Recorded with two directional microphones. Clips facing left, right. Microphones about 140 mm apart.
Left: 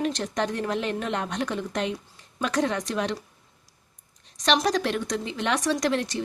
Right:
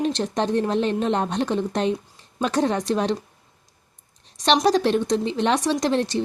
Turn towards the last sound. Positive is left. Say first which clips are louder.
# right 4 dB
turn(degrees=-30)  # may be behind; listen again after turning